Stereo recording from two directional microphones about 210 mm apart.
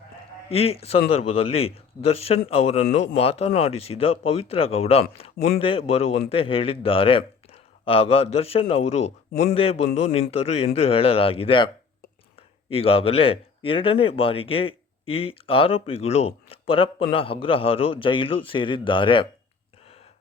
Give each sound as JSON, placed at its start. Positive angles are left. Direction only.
{"t": 0.5, "sound": "speech", "side_deg": 30}
{"t": 12.7, "sound": "speech", "side_deg": 25}